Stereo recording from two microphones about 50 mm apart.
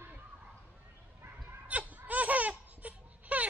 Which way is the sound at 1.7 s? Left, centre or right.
Right.